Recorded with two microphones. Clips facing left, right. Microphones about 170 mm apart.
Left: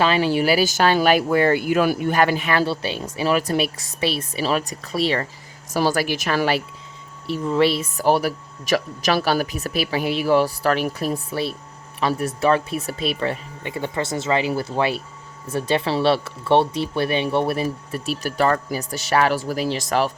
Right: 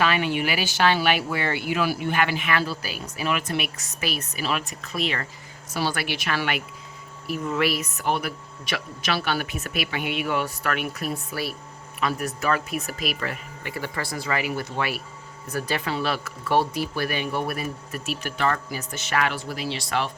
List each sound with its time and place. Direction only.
0.0 s speech: 30° left (ahead or behind)